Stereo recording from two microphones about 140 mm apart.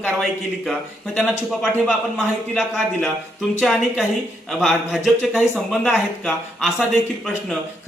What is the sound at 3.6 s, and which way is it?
Speech, centre (ahead or behind).